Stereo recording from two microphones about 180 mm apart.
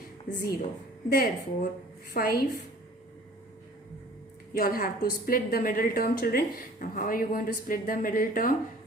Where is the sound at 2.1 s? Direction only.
60° left (ahead or behind).